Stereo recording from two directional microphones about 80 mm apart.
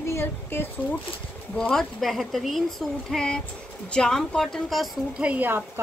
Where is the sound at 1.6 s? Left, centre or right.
Centre.